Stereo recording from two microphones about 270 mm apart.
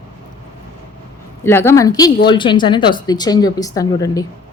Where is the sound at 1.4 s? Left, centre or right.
Centre.